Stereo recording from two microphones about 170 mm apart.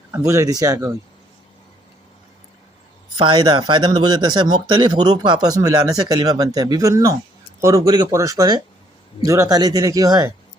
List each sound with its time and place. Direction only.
0.1 s speech: 15° right (ahead or behind)
3.2 s speech: 25° right (ahead or behind)